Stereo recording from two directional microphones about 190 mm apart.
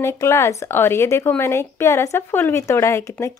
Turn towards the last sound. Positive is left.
turn(degrees=15)  # may be behind; listen again after turning